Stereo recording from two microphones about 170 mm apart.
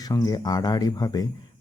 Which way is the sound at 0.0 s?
20° left (ahead or behind).